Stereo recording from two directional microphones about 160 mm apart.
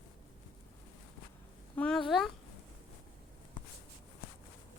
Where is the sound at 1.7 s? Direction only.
5° left (ahead or behind).